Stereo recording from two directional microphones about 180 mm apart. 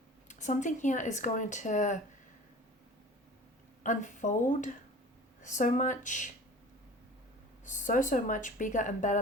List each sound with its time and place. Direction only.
0.3 s speech: 40° left (ahead or behind)
3.8 s speech: 45° left (ahead or behind)
7.6 s speech: 45° left (ahead or behind)